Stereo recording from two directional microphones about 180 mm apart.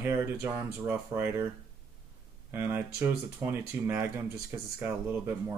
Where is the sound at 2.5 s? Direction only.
10° right (ahead or behind).